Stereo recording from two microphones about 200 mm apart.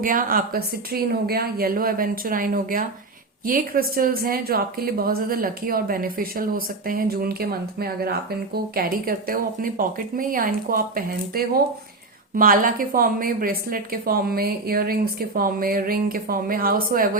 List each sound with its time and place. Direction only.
0.0 s a woman's voice: 45° right (ahead or behind)